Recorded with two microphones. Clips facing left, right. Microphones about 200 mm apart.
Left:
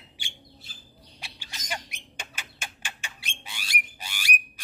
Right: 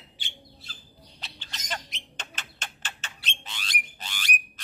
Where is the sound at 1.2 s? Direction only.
10° left (ahead or behind).